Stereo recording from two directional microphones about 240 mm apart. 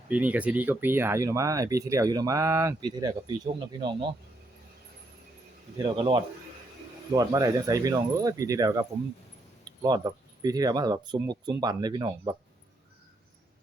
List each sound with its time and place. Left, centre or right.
0.1 s speech: centre
5.7 s speech: right